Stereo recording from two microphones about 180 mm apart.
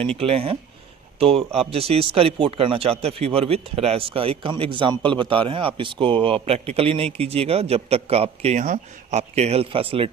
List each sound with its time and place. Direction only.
0.2 s speech: 30° right (ahead or behind)